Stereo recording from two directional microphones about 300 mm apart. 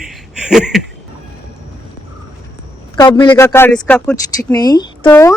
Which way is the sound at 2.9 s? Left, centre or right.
Centre.